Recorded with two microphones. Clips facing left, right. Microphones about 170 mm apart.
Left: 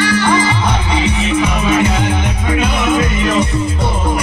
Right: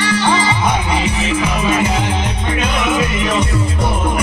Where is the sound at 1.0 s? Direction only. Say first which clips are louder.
Left 3 dB; 5° right (ahead or behind).